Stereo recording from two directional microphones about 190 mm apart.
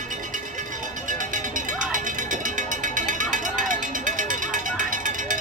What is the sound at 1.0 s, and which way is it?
Music, 45° right (ahead or behind).